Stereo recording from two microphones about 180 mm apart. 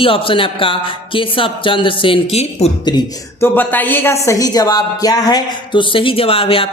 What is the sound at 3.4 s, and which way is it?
A woman's voice, 10° left (ahead or behind).